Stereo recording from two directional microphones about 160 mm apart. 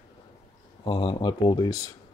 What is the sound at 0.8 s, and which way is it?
Speech, 30° left (ahead or behind).